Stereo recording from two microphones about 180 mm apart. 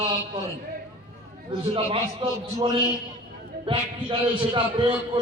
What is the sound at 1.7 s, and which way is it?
A man's voice, 30° right (ahead or behind).